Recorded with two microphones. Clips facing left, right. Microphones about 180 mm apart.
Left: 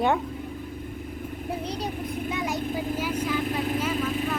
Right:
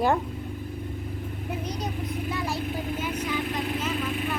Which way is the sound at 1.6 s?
30° left (ahead or behind).